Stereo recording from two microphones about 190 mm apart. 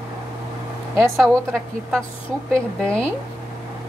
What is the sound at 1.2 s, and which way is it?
Speech, centre (ahead or behind).